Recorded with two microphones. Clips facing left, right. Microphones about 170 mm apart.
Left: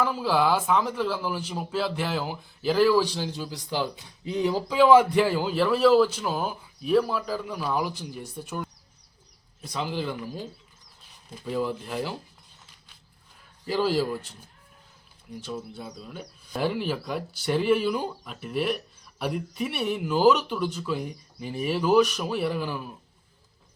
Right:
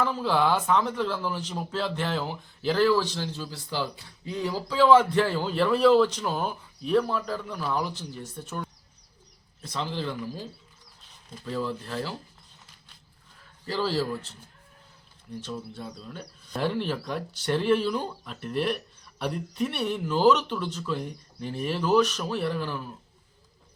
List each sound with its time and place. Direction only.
0.0 s speech: 5° left (ahead or behind)
11.4 s speech: 15° left (ahead or behind)
13.7 s speech: 15° left (ahead or behind)
15.4 s speech: 10° left (ahead or behind)